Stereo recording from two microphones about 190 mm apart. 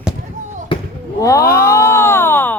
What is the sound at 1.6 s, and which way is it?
Speech, 15° left (ahead or behind).